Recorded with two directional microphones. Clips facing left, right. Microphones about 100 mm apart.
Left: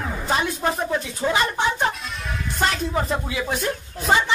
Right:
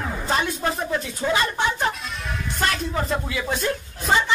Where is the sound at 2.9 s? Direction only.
10° left (ahead or behind).